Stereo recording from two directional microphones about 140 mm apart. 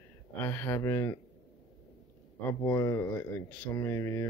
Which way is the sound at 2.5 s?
20° left (ahead or behind).